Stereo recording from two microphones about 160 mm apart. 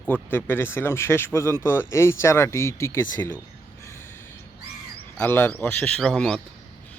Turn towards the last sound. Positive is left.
turn(degrees=5)  # may be behind; listen again after turning